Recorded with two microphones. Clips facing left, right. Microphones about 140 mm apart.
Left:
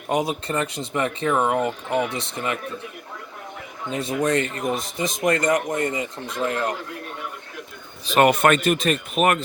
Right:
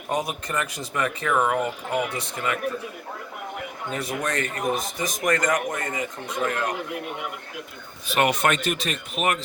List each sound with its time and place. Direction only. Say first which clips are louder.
0.1 s speech: left 4 dB; 20° left (ahead or behind)
3.9 s speech: left 6 dB; 25° left (ahead or behind)
6.7 s a man's voice: right 3 dB; 15° right (ahead or behind)
8.1 s speech: left 5 dB; 50° left (ahead or behind)